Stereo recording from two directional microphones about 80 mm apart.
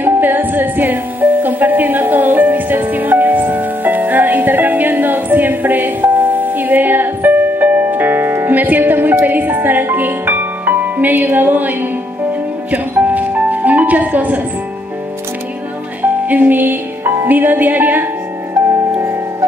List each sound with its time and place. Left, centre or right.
0.0 s music: right
12.7 s music: centre
16.0 s music: right
18.5 s music: right